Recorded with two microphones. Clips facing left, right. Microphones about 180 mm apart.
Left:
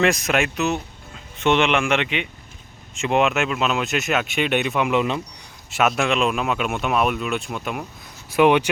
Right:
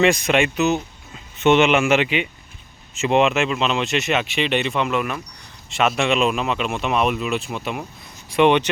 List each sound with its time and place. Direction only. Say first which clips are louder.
0.0 s speech: right 3 dB; centre (ahead or behind)
4.9 s speech: left 3 dB; 20° left (ahead or behind)
5.7 s speech: right 1 dB; centre (ahead or behind)